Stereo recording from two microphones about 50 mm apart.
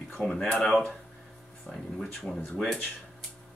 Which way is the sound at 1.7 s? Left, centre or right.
Left.